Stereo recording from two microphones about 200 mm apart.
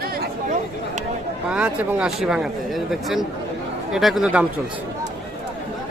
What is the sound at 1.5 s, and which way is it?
A man's voice, 5° right (ahead or behind).